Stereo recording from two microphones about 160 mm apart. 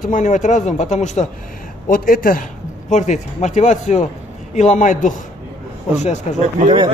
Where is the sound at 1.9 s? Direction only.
60° left (ahead or behind).